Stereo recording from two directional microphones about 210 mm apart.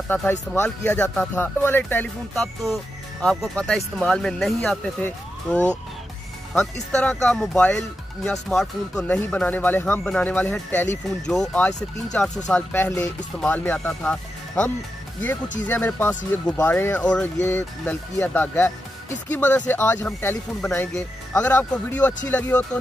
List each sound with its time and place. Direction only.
0.1 s speech: 5° left (ahead or behind)